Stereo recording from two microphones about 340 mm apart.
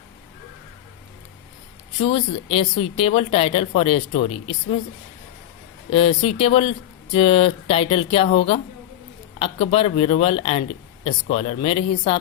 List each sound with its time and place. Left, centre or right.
2.0 s speech: centre
5.9 s speech: centre